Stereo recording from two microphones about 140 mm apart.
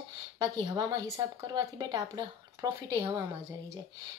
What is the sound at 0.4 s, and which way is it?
Speech, 30° right (ahead or behind).